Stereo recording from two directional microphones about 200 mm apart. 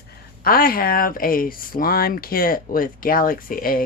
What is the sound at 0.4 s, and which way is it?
Speech, 50° left (ahead or behind).